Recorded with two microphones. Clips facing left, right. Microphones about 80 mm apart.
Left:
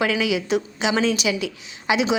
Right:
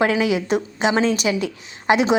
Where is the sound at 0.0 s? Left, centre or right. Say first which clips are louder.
Right 3 dB; right.